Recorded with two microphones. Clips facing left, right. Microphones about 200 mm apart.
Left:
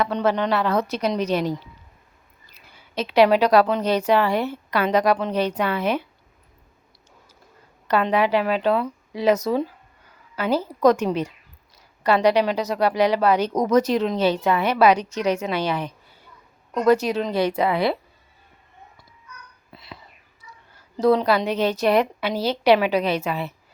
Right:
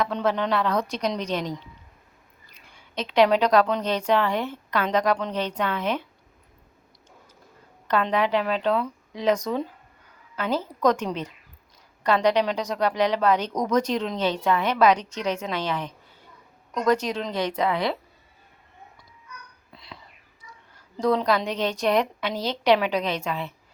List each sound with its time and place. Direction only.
0.0 s a woman's voice: centre (ahead or behind)
7.9 s a woman's voice: 10° left (ahead or behind)
19.7 s whispering: 5° left (ahead or behind)
20.5 s a woman's voice: 5° left (ahead or behind)